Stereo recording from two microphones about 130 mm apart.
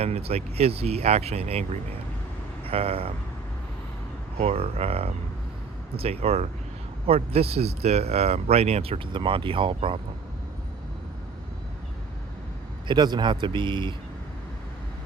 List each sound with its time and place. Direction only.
0.0 s speech: 50° right (ahead or behind)
4.4 s speech: 50° right (ahead or behind)
12.9 s speech: 35° right (ahead or behind)